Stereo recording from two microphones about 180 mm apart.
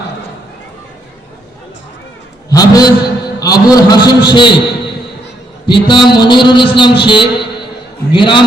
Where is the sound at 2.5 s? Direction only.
20° left (ahead or behind).